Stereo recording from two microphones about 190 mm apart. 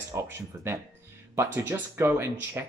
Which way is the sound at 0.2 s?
15° right (ahead or behind).